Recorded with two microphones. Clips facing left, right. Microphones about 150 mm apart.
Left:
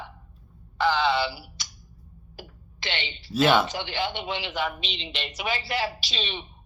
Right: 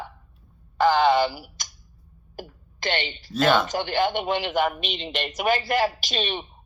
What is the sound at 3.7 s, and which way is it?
Speech, 45° right (ahead or behind).